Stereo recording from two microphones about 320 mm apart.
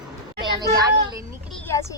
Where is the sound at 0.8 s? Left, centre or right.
Centre.